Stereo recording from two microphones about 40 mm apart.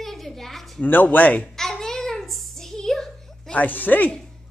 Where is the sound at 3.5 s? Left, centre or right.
Left.